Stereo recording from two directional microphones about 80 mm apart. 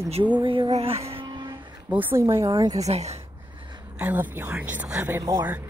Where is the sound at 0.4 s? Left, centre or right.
Right.